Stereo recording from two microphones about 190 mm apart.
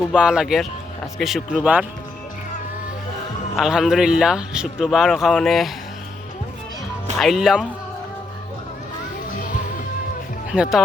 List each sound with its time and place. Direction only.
0.1 s a man's voice: 5° right (ahead or behind)
3.5 s a man's voice: 5° right (ahead or behind)
7.2 s a man's voice: centre (ahead or behind)
10.5 s a man's voice: 5° right (ahead or behind)